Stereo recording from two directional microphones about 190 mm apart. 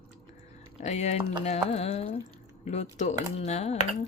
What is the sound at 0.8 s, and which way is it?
Speech, 35° left (ahead or behind).